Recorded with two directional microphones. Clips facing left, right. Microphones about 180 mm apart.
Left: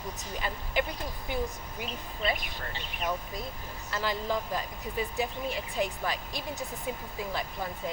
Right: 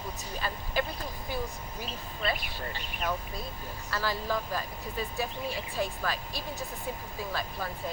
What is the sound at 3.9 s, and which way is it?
Speech, 20° left (ahead or behind).